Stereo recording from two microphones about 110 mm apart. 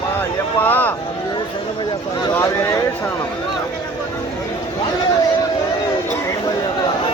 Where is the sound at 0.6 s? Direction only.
15° left (ahead or behind).